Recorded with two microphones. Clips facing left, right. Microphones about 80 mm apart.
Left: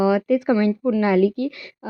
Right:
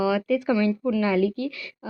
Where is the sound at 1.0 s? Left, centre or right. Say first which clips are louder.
Left 6 dB; left.